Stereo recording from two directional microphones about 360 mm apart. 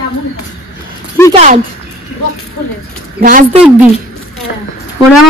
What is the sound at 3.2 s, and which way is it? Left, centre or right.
Speech, right.